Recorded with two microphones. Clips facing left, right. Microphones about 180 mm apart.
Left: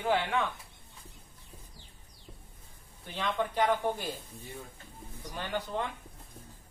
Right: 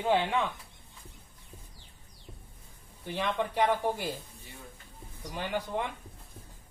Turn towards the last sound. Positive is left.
turn(degrees=-10)  # may be behind; listen again after turning